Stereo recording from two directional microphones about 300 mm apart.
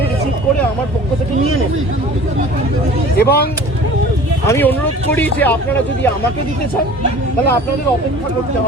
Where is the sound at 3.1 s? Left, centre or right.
Left.